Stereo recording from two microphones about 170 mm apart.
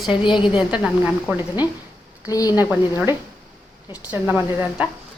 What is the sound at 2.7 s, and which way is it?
Speech, 10° right (ahead or behind).